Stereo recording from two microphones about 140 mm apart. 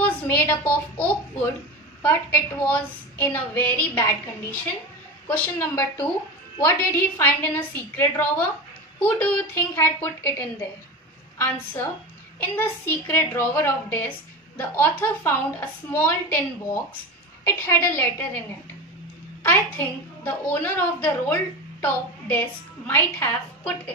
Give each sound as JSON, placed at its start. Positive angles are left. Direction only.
{"t": 0.0, "sound": "a woman's voice", "side_deg": 15}
{"t": 2.6, "sound": "a woman's voice", "side_deg": 10}
{"t": 19.4, "sound": "a woman's voice", "side_deg": 15}